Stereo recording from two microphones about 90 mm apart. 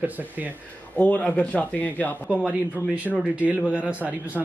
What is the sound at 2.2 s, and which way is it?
Speech, 15° right (ahead or behind).